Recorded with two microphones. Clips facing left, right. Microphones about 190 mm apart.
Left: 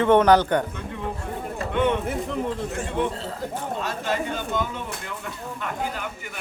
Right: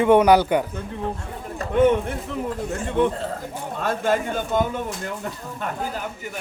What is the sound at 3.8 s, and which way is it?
A man's voice, 50° right (ahead or behind).